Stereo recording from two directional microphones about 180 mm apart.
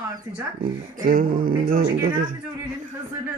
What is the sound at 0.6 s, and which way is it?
Speech, 50° right (ahead or behind).